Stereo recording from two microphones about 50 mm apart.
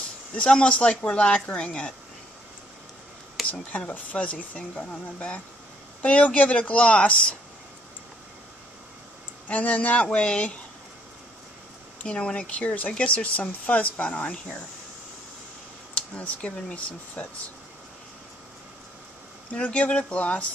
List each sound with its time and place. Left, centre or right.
0.4 s speech: centre
3.4 s a sound: centre
3.7 s speech: left
9.5 s speech: left
12.1 s speech: centre
15.9 s speech: left
19.5 s speech: left